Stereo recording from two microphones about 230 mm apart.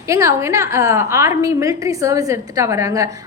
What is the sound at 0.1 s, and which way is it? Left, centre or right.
A woman's voice, centre.